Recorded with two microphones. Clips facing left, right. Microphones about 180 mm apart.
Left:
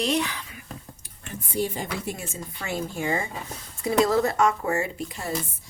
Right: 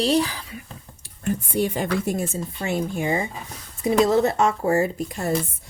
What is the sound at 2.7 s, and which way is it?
A woman's voice, 20° right (ahead or behind).